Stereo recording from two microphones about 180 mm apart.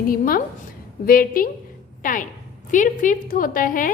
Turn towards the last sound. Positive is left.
turn(degrees=50)  # may be behind; listen again after turning